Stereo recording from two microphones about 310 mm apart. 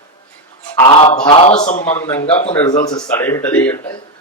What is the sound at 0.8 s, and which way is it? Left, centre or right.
A man's voice, centre.